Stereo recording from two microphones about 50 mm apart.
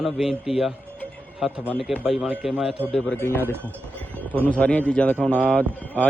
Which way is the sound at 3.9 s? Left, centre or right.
Left.